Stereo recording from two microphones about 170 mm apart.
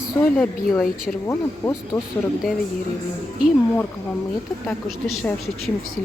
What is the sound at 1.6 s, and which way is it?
Speech, 20° left (ahead or behind).